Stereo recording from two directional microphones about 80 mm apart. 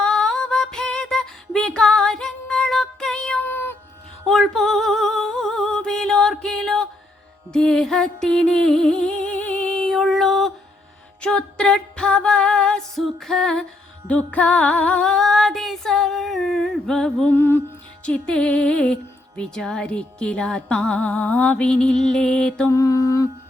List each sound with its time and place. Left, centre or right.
0.0 s a sound: centre
3.4 s a sound: left
4.3 s music: centre
17.2 s music: left
18.0 s music: centre
21.7 s music: centre
22.7 s mantra: left